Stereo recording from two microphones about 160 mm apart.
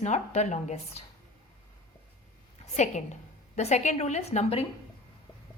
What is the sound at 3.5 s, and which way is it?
A woman's voice, 45° left (ahead or behind).